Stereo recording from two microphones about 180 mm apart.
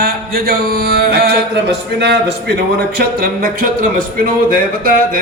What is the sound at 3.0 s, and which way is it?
Speech, 55° right (ahead or behind).